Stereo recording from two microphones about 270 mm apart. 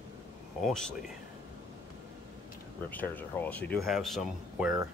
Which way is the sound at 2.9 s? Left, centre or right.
Centre.